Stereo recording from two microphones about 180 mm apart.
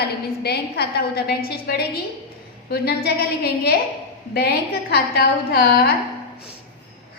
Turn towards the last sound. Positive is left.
turn(degrees=55)  # may be behind; listen again after turning